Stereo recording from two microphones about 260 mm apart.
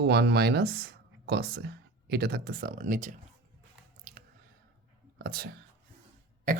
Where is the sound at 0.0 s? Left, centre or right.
Right.